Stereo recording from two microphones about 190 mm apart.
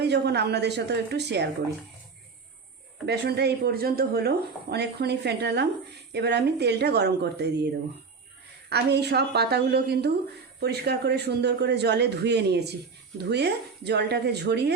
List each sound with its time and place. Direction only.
0.0 s speech: 60° right (ahead or behind)
3.1 s speech: 60° right (ahead or behind)
8.7 s speech: 60° right (ahead or behind)